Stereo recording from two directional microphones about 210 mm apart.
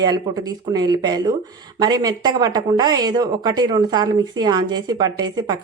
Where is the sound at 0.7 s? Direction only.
20° right (ahead or behind).